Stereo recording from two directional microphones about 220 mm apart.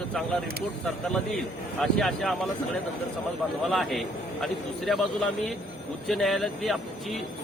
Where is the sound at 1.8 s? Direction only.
Centre (ahead or behind).